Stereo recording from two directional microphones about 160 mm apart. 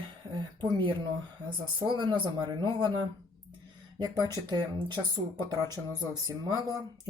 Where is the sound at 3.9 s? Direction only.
25° right (ahead or behind).